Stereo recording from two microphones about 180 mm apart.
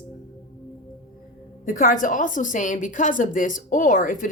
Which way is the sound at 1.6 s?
50° left (ahead or behind).